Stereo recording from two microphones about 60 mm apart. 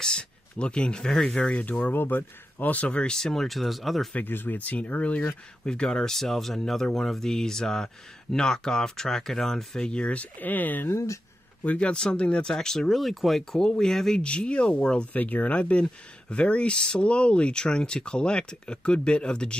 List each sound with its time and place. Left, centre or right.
0.0 s speech: centre
3.1 s speech: centre
4.1 s speech: left
5.7 s speech: centre
9.8 s speech: centre
10.9 s speech: left
11.6 s speech: left; by 13.6 s centre
13.6 s speech: centre
14.2 s speech: centre
15.1 s speech: left